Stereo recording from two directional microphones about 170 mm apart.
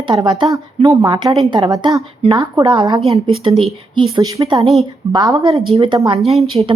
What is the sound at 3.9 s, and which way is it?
Speech, 30° right (ahead or behind).